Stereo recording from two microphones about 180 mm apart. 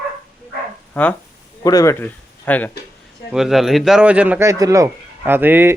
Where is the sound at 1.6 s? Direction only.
20° left (ahead or behind).